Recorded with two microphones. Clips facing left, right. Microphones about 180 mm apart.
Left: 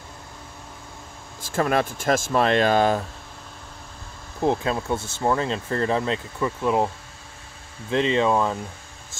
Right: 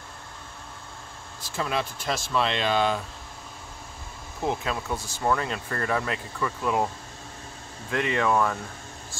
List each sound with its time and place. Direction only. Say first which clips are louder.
1.4 s speech: left 7 dB; 50° left (ahead or behind)
4.4 s speech: left 6 dB; 30° left (ahead or behind)
7.9 s speech: left 4 dB; 25° left (ahead or behind)